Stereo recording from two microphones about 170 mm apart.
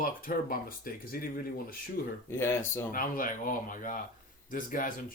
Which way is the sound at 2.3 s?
15° left (ahead or behind).